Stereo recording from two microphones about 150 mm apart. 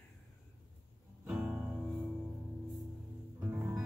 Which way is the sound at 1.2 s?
10° right (ahead or behind).